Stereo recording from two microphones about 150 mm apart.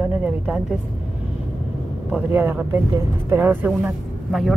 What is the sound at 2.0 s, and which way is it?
Speech, 10° right (ahead or behind).